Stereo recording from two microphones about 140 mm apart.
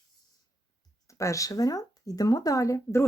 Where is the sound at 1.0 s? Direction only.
20° left (ahead or behind).